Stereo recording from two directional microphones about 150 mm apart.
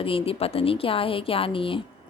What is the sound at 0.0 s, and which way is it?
Speech, 40° left (ahead or behind).